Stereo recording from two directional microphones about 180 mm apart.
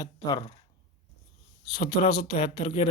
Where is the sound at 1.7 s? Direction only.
25° left (ahead or behind).